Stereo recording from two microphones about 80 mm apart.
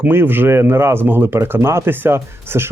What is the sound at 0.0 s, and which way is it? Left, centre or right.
Speech, right.